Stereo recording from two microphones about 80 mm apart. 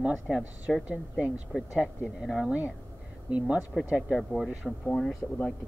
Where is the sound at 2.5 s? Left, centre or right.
Centre.